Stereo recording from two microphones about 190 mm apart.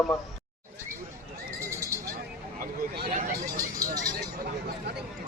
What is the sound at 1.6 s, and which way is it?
Sheep, 15° right (ahead or behind).